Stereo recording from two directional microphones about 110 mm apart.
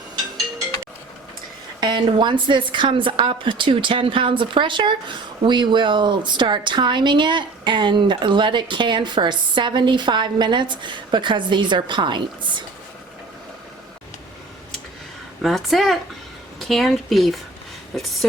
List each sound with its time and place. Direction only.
1.8 s a woman's voice: 45° right (ahead or behind)
15.4 s speech: centre (ahead or behind)